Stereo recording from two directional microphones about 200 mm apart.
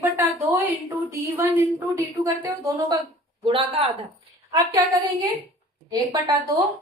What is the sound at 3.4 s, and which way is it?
Speech, 25° right (ahead or behind).